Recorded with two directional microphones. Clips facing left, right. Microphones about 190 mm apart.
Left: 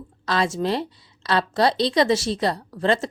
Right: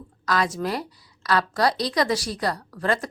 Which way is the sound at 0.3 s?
25° left (ahead or behind).